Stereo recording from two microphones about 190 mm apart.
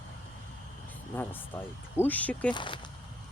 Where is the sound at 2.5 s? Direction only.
25° left (ahead or behind).